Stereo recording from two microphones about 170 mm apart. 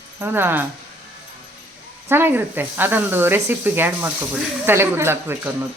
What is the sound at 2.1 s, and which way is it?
A woman's voice, 10° right (ahead or behind).